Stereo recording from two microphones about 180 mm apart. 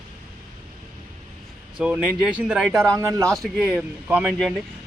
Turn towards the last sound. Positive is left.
turn(degrees=-5)  # may be behind; listen again after turning